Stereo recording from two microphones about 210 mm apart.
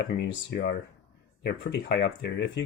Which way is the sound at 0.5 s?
50° left (ahead or behind).